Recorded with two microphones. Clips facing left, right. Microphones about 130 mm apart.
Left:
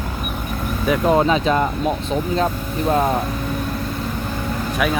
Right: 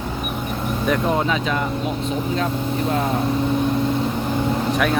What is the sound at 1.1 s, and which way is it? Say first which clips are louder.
Speech: left 5 dB; 30° left (ahead or behind).